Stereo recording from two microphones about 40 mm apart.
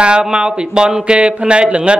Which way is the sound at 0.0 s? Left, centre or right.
Right.